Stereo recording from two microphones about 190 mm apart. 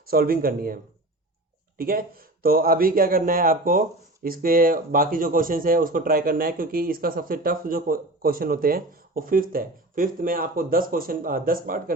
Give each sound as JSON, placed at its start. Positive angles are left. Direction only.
{"t": 0.1, "sound": "a man's voice", "side_deg": -50}
{"t": 1.8, "sound": "a man's voice", "side_deg": -50}